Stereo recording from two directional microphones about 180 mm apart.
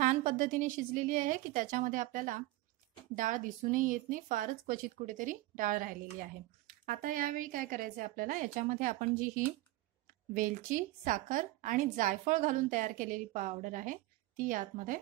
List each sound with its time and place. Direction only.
0.0 s a woman's voice: 40° right (ahead or behind)